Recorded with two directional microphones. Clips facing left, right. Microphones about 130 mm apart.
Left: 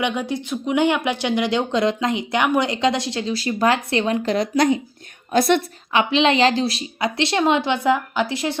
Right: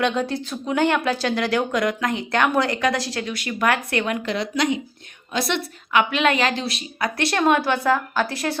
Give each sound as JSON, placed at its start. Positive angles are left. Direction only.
{"t": 0.0, "sound": "a woman's voice", "side_deg": 10}
{"t": 5.9, "sound": "speech", "side_deg": 30}
{"t": 7.0, "sound": "speech", "side_deg": 20}